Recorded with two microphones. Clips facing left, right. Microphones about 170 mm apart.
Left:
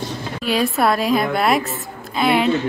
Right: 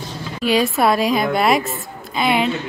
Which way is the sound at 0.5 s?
Centre (ahead or behind).